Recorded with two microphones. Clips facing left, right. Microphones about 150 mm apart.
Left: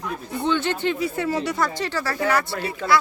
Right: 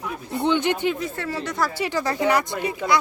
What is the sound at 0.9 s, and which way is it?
Speech, 10° left (ahead or behind).